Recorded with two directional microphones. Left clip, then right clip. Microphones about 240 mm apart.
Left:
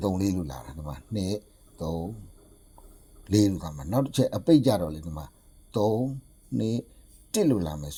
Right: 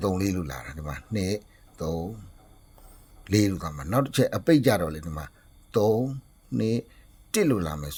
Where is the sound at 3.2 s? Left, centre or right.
Centre.